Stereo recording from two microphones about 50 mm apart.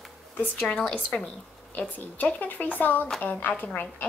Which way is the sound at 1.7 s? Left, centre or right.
Left.